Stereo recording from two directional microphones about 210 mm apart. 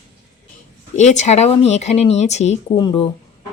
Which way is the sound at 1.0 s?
35° left (ahead or behind).